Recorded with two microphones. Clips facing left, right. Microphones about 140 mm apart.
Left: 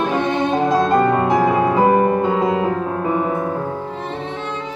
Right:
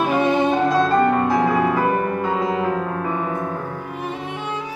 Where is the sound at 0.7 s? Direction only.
20° left (ahead or behind).